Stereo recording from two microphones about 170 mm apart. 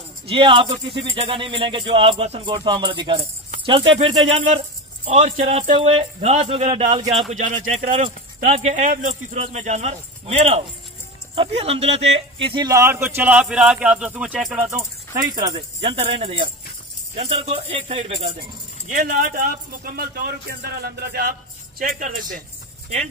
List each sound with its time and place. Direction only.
0.3 s speech: 30° right (ahead or behind)
4.5 s speech: 45° right (ahead or behind); by 14.7 s 5° right (ahead or behind)
15.1 s speech: 20° right (ahead or behind)
15.5 s speech: 35° right (ahead or behind)
18.9 s speech: 50° right (ahead or behind)